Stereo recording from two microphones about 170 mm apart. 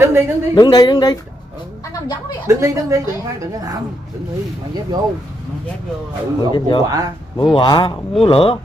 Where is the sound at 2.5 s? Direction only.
15° right (ahead or behind).